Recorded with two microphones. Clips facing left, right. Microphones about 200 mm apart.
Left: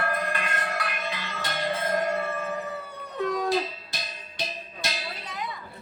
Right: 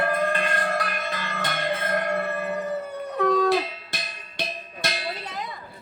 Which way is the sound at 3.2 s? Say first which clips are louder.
Right 5 dB; 65° right (ahead or behind).